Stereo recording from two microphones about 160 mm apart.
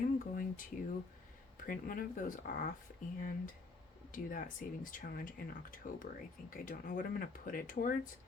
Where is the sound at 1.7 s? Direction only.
60° left (ahead or behind).